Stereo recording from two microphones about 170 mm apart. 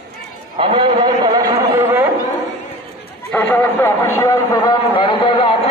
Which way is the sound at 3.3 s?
10° left (ahead or behind).